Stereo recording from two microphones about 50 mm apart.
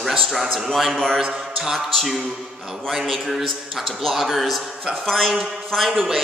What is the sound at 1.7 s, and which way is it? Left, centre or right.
Speech, centre.